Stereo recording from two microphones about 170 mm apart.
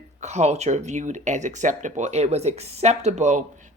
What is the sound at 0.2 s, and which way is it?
Speech, 40° right (ahead or behind).